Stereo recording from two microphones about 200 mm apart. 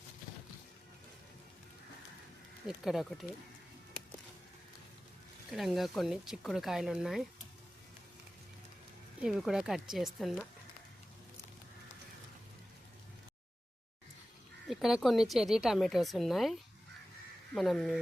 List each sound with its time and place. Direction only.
2.6 s a woman's voice: centre (ahead or behind)
5.5 s a woman's voice: centre (ahead or behind)
9.2 s a woman's voice: centre (ahead or behind)
14.7 s a woman's voice: centre (ahead or behind)